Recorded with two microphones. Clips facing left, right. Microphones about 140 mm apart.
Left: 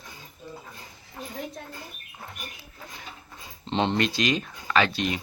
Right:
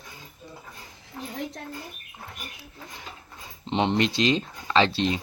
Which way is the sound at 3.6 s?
15° right (ahead or behind).